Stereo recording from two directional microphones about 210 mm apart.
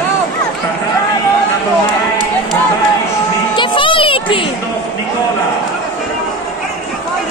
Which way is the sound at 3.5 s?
25° left (ahead or behind).